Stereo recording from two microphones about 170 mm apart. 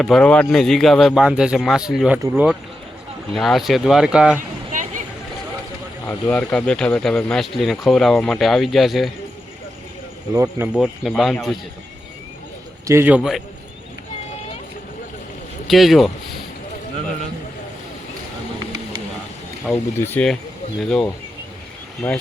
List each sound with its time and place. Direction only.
0.0 s a man's voice: 5° left (ahead or behind)
4.7 s a sound: 50° right (ahead or behind)
6.1 s speech: 10° left (ahead or behind)
10.3 s speech: 20° right (ahead or behind)
10.8 s speech: centre (ahead or behind)
12.9 s a man's voice: 10° right (ahead or behind)
15.6 s speech: centre (ahead or behind)
19.7 s speech: 10° left (ahead or behind)
22.0 s speech: 10° left (ahead or behind)